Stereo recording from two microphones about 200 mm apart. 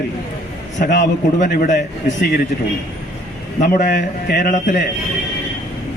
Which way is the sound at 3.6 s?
45° left (ahead or behind).